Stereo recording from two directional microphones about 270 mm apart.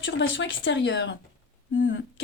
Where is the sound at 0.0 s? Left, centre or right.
Left.